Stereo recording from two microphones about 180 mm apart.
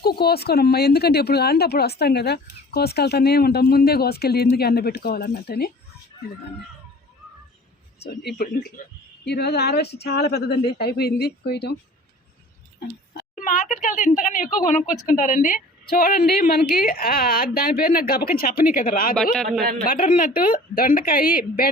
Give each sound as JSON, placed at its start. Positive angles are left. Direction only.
{"t": 0.0, "sound": "speech", "side_deg": 60}
{"t": 8.0, "sound": "speech", "side_deg": 65}
{"t": 13.3, "sound": "a woman's voice", "side_deg": 45}
{"t": 19.1, "sound": "a man's voice", "side_deg": 0}
{"t": 19.9, "sound": "a woman's voice", "side_deg": 50}